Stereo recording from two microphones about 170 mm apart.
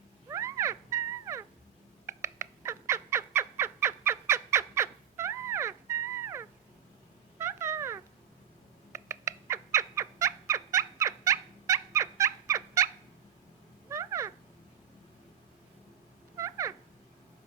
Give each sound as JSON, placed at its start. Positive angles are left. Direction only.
{"t": 0.3, "sound": "cat", "side_deg": -15}
{"t": 2.0, "sound": "fowl", "side_deg": -15}
{"t": 7.3, "sound": "cat", "side_deg": -15}
{"t": 8.9, "sound": "bird", "side_deg": -15}
{"t": 13.9, "sound": "a sound", "side_deg": -15}
{"t": 16.4, "sound": "a sound", "side_deg": -20}